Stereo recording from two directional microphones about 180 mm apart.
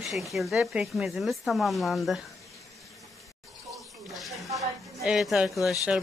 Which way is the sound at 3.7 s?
Centre (ahead or behind).